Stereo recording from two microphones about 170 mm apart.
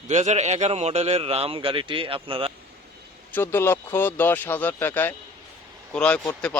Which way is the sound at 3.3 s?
15° left (ahead or behind).